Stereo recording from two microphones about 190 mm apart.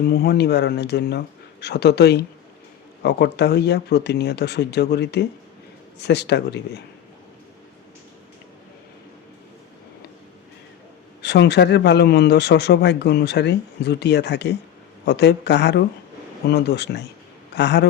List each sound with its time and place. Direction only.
0.0 s speech: 55° left (ahead or behind)
11.2 s speech: 65° left (ahead or behind)